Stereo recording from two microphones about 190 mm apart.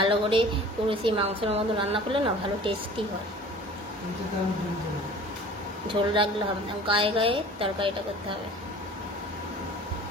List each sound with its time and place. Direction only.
0.0 s a woman's voice: 30° right (ahead or behind)
5.9 s a woman's voice: 25° right (ahead or behind)